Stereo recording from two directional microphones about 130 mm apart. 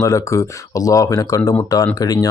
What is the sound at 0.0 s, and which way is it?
Speech, 25° left (ahead or behind).